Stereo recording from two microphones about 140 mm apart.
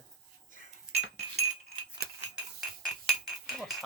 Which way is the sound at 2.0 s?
90° right.